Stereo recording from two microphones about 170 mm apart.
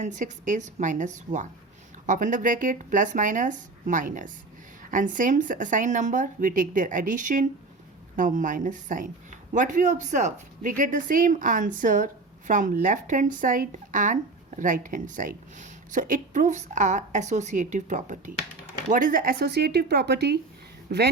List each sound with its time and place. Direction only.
0.0 s a woman's voice: 45° right (ahead or behind); by 21.0 s 65° right (ahead or behind)